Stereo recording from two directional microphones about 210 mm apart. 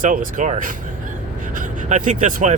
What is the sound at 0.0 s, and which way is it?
Speech, 40° right (ahead or behind).